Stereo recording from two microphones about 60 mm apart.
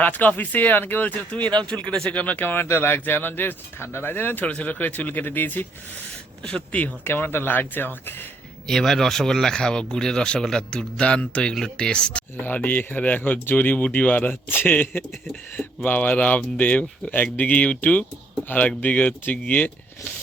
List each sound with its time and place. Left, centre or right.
0.0 s speech: left
2.6 s speech: left
4.4 s speech: left
6.7 s speech: left
7.0 s speech: left
8.6 s speech: centre
12.6 s speech: left